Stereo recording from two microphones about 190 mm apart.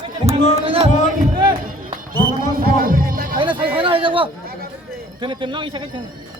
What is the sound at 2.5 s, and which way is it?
Music, 50° right (ahead or behind).